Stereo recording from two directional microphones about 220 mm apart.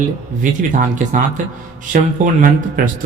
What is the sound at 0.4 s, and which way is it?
A man's voice, 35° right (ahead or behind).